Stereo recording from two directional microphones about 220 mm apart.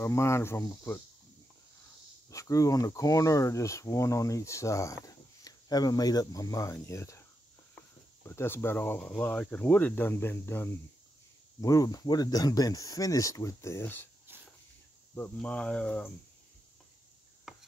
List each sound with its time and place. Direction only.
0.0 s speech: 10° left (ahead or behind)
2.3 s speech: 15° left (ahead or behind)
15.1 s speech: 5° left (ahead or behind)
17.5 s chopping: centre (ahead or behind)